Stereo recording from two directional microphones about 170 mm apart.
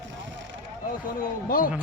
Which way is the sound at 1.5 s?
55° left (ahead or behind).